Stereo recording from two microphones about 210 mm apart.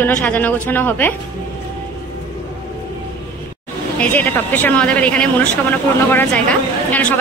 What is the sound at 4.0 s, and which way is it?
A man's voice, 10° left (ahead or behind).